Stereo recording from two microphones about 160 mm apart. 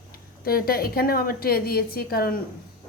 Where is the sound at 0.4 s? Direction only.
70° left (ahead or behind).